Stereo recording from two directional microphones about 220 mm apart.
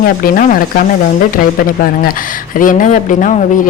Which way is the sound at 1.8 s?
40° left (ahead or behind).